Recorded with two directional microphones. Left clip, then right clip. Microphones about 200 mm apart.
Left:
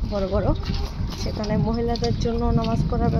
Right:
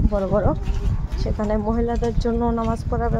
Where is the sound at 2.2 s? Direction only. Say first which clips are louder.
Right 2 dB; 20° right (ahead or behind).